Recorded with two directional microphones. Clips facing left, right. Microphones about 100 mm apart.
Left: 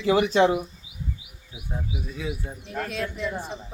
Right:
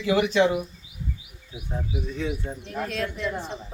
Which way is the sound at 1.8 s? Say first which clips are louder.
Right 4 dB; 5° left (ahead or behind).